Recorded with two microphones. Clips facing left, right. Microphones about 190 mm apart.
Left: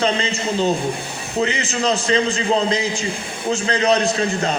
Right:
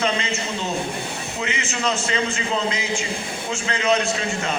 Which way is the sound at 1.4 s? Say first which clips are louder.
Left 8 dB; 35° left (ahead or behind).